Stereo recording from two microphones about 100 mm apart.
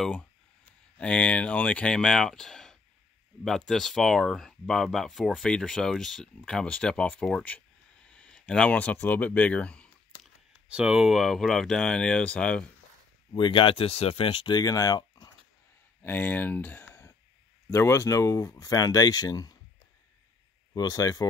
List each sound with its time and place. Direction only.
0.0 s speech: 10° left (ahead or behind)
10.2 s speech: 10° right (ahead or behind); by 12.6 s 10° left (ahead or behind)
13.3 s speech: 60° left (ahead or behind)
14.5 s speech: 40° left (ahead or behind)
16.0 s speech: 20° left (ahead or behind); by 19.5 s 40° left (ahead or behind)
20.7 s speech: 40° left (ahead or behind)